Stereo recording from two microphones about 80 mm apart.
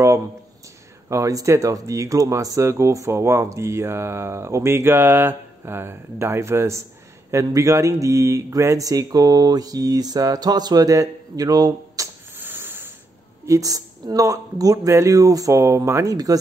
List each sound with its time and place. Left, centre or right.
1.0 s speech: right
8.0 s mantra: right
12.4 s a sound: right
13.5 s mantra: right